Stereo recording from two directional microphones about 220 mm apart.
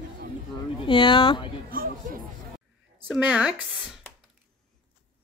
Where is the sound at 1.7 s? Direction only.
40° right (ahead or behind).